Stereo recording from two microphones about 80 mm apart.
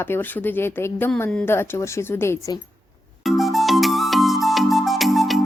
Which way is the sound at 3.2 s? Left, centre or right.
Centre.